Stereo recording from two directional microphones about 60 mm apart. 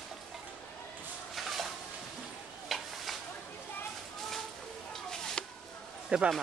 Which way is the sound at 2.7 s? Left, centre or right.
Centre.